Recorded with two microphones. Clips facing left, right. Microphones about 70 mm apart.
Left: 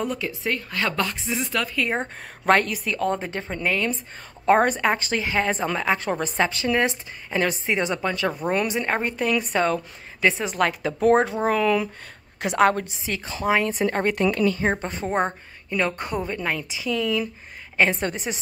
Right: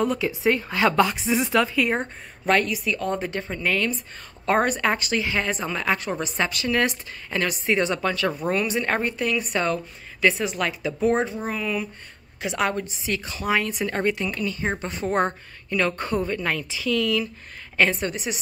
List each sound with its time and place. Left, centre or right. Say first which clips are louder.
0.0 s speech: right 4 dB; centre
0.4 s a woman's voice: right 7 dB; centre
2.4 s a woman's voice: left 2 dB; left; by 9.1 s centre
9.4 s a woman's voice: left 2 dB; left
10.5 s speech: left 3 dB; left
11.3 s speech: left 7 dB; left
12.4 s a woman's voice: left 5 dB; left
14.1 s speech: left 7 dB; left
14.6 s a woman's voice: left 3 dB; left
15.0 s a woman's voice: right 1 dB; centre
17.9 s a woman's voice: left 1 dB; left